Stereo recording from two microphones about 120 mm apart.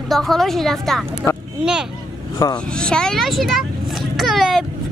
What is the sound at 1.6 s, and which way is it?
Speech, 5° right (ahead or behind).